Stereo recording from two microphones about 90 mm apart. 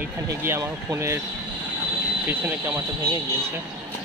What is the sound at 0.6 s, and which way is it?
Speech, 35° right (ahead or behind).